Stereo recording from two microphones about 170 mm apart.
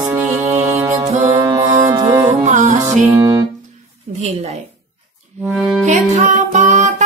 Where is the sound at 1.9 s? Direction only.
15° right (ahead or behind).